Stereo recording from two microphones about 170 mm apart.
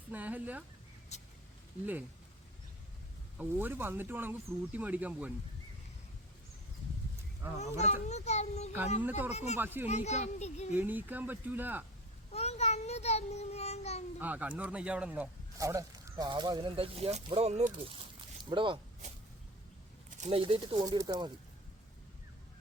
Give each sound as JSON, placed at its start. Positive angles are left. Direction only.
{"t": 0.1, "sound": "speech", "side_deg": -10}
{"t": 1.1, "sound": "speech", "side_deg": 40}
{"t": 3.3, "sound": "speech", "side_deg": -10}
{"t": 7.6, "sound": "a child's voice", "side_deg": 40}
{"t": 9.0, "sound": "speech", "side_deg": -10}
{"t": 9.3, "sound": "a child's voice", "side_deg": 40}
{"t": 9.6, "sound": "speech", "side_deg": -10}
{"t": 9.8, "sound": "a child's voice", "side_deg": 40}
{"t": 10.8, "sound": "speech", "side_deg": -10}
{"t": 12.3, "sound": "child singing", "side_deg": 40}
{"t": 14.2, "sound": "speech", "side_deg": -10}
{"t": 15.5, "sound": "speech", "side_deg": -20}
{"t": 20.1, "sound": "a sound", "side_deg": -45}
{"t": 20.4, "sound": "speech", "side_deg": -25}